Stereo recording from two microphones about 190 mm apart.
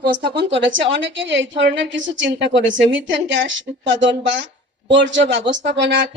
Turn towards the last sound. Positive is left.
turn(degrees=-70)  # may be behind; listen again after turning